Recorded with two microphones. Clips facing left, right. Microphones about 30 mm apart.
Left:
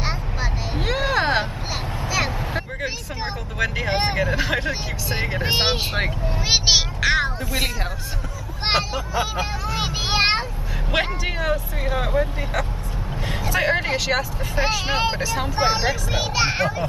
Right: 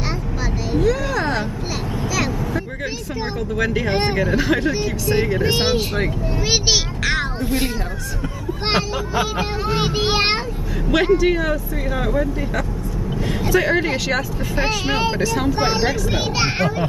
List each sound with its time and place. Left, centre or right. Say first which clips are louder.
0.7 s a sound: right 2 dB; left
2.0 s vehicle: right 1 dB; left
3.5 s speech: right 2 dB; centre; by 6.1 s left
6.4 s a child's voice: left 1 dB; centre
9.7 s speech: right 5 dB; centre
11.0 s speech: right 8 dB; centre
13.5 s a child's voice: right 3 dB; centre
15.2 s a child's voice: right 2 dB; centre